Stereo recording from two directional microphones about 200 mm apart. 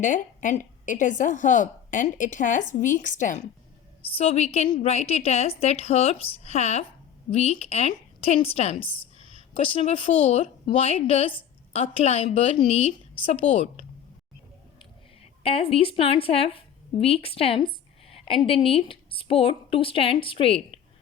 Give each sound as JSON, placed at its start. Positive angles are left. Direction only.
{"t": 0.0, "sound": "a woman's voice", "side_deg": 40}
{"t": 15.4, "sound": "a woman's voice", "side_deg": 30}